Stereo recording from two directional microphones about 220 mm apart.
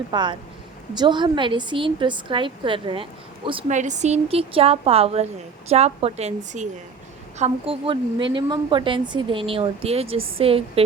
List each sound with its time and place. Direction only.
0.1 s a woman's voice: 20° right (ahead or behind)